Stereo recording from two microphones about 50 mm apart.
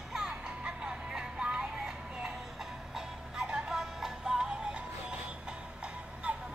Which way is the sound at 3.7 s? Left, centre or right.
Centre.